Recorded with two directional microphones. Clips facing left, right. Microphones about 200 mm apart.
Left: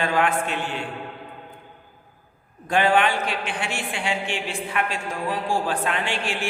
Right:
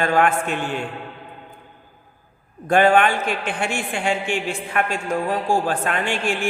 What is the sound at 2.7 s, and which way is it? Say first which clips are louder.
A woman's voice: right 4 dB; 50° right (ahead or behind).